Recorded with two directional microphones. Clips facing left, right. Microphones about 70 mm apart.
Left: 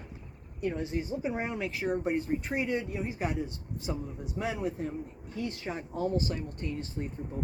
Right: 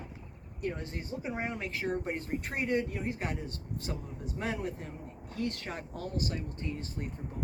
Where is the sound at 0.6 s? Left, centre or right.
Centre.